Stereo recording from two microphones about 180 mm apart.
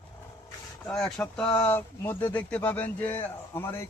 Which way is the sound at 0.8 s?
5° left (ahead or behind).